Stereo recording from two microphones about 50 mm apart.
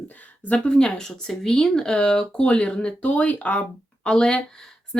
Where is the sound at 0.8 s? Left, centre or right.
Centre.